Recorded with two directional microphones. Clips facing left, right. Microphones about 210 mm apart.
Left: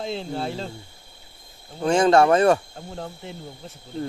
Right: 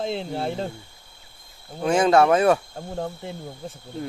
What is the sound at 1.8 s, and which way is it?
Speech, 5° right (ahead or behind).